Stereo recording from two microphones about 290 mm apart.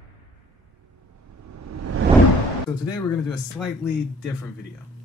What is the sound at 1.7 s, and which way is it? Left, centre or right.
Whoosh, right.